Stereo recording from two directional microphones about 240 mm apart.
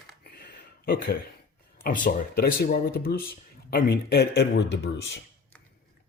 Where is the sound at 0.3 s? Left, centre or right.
Left.